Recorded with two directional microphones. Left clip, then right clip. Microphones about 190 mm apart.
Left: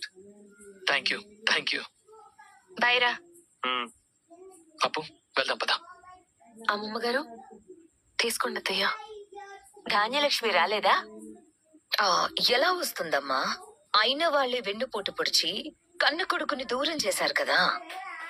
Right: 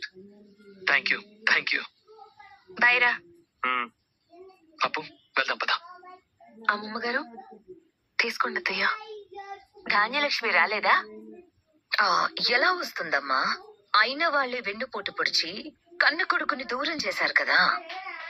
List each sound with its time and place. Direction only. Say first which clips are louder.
0.9 s speech: right 3 dB; 15° left (ahead or behind)